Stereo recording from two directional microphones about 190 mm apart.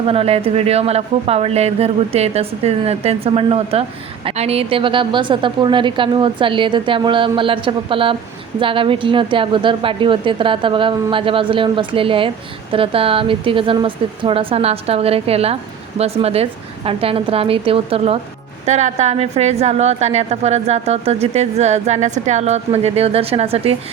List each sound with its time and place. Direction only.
0.0 s a woman's voice: 30° right (ahead or behind)